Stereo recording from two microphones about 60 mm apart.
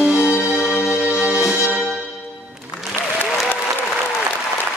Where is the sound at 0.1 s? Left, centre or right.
Left.